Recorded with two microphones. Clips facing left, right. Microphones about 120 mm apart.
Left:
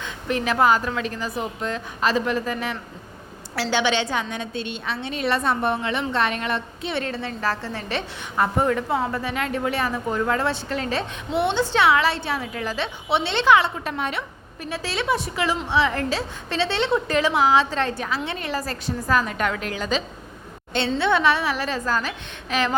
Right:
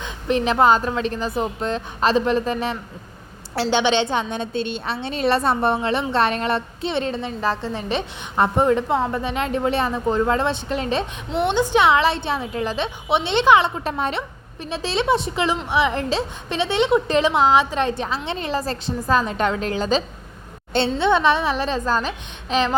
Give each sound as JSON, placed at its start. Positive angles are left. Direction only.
{"t": 0.0, "sound": "a woman's voice", "side_deg": -25}
{"t": 21.0, "sound": "a woman's voice", "side_deg": -20}